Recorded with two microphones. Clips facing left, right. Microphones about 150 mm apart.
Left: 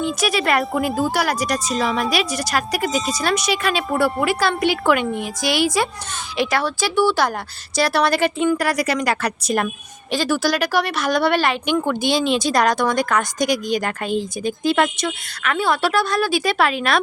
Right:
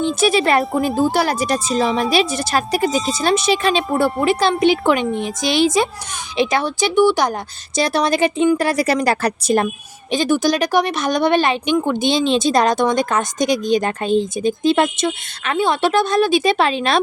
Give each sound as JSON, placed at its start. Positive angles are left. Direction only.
{"t": 0.2, "sound": "speech", "side_deg": -25}
{"t": 10.1, "sound": "speech", "side_deg": -20}